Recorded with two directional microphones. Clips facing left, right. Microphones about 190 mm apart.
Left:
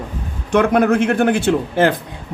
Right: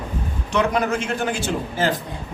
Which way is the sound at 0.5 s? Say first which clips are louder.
Left 7 dB; 55° left (ahead or behind).